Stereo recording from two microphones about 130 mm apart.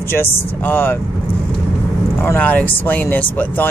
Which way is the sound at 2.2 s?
15° left (ahead or behind).